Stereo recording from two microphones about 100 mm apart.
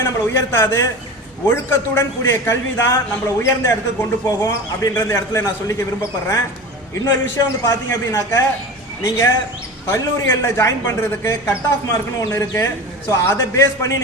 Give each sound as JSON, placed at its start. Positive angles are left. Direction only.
{"t": 0.0, "sound": "speech", "side_deg": 25}
{"t": 4.8, "sound": "speech", "side_deg": 30}